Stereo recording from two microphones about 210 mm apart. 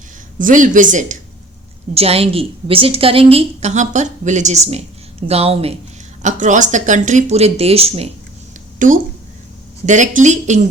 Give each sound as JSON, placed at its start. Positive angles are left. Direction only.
{"t": 0.3, "sound": "a woman's voice", "side_deg": -40}
{"t": 8.8, "sound": "speech", "side_deg": -40}